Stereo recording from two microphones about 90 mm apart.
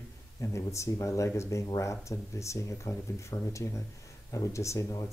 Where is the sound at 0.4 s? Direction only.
35° left (ahead or behind).